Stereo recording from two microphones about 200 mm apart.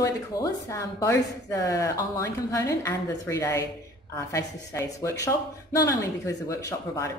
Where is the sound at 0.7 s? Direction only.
15° left (ahead or behind).